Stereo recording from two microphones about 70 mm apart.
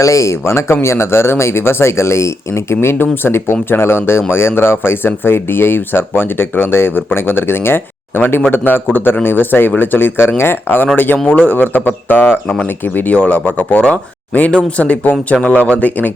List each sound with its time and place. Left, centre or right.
0.0 s speech: left